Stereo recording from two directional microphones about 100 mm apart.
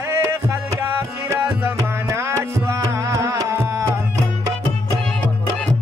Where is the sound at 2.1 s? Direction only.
30° right (ahead or behind).